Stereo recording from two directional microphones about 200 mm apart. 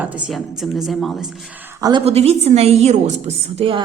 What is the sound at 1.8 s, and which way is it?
Speech, 20° right (ahead or behind).